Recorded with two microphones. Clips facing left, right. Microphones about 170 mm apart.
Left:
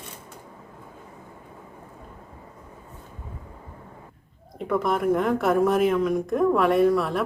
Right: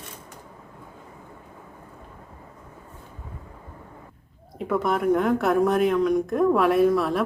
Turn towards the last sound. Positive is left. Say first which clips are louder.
# even
turn(degrees=0)  # may be behind; listen again after turning